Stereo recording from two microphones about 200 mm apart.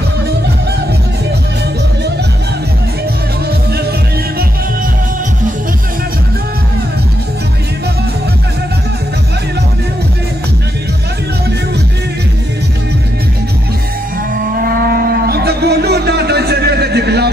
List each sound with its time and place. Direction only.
14.6 s moo: 45° right (ahead or behind)